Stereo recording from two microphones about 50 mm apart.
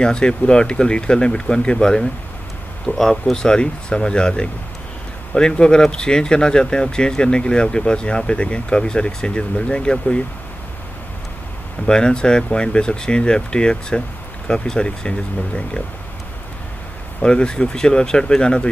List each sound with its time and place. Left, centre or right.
0.0 s speech: centre
11.9 s speech: centre
17.2 s speech: centre